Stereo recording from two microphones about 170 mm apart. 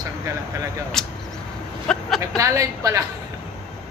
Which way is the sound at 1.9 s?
Centre (ahead or behind).